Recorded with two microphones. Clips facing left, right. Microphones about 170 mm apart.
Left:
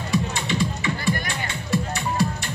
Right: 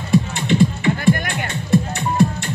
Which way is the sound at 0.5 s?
50° right (ahead or behind).